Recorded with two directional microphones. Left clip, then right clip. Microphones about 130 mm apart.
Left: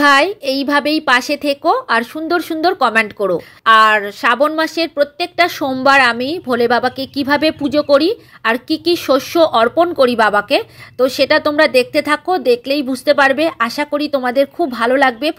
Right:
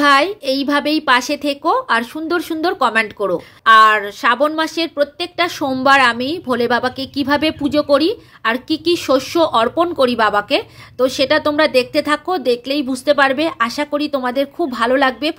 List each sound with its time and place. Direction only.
0.0 s a woman's voice: 30° left (ahead or behind)